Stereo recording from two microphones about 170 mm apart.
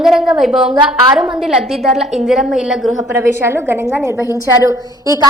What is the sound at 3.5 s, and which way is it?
A woman's voice, 15° right (ahead or behind).